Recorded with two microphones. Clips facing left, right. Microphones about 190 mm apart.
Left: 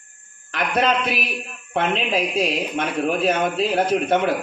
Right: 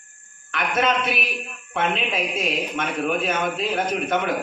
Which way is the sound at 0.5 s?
35° left (ahead or behind).